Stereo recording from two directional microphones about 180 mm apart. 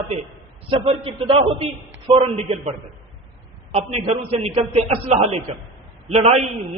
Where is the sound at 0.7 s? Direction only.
30° right (ahead or behind).